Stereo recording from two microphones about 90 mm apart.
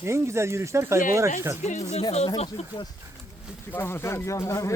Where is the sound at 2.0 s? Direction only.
90° left.